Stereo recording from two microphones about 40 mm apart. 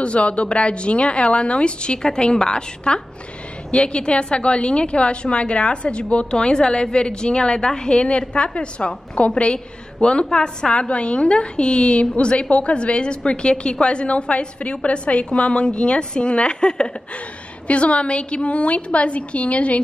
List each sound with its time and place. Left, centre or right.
0.0 s a woman's voice: left